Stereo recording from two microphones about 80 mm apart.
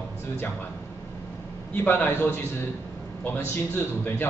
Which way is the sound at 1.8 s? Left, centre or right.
Left.